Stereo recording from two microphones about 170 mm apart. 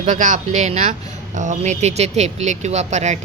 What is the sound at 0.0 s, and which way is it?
Speech, 45° right (ahead or behind).